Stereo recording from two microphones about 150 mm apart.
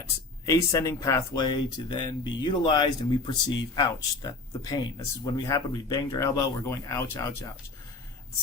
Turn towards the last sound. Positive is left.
turn(degrees=20)  # may be behind; listen again after turning